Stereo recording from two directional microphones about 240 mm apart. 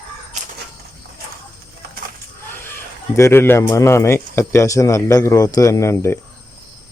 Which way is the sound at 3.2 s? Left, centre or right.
Centre.